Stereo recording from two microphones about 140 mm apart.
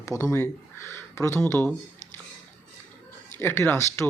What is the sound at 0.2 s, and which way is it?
Speech, 20° left (ahead or behind).